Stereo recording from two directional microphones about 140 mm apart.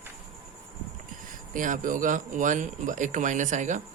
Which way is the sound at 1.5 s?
70° right (ahead or behind).